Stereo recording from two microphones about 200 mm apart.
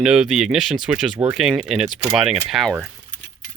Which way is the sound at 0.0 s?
5° right (ahead or behind).